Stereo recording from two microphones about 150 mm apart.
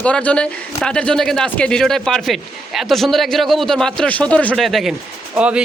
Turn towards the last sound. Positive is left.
turn(degrees=-10)  # may be behind; listen again after turning